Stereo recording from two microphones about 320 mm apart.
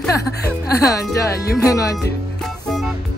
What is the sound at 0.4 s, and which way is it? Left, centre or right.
Speech, left.